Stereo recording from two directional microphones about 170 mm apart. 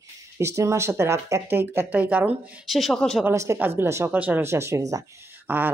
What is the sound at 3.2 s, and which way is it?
Speech, 15° right (ahead or behind).